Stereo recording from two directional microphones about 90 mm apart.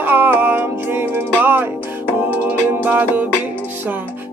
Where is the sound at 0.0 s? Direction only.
20° right (ahead or behind).